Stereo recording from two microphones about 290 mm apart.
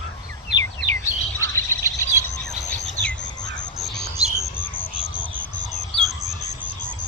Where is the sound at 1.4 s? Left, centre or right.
Centre.